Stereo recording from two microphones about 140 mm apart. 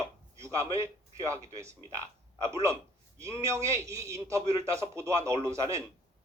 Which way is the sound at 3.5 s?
20° right (ahead or behind).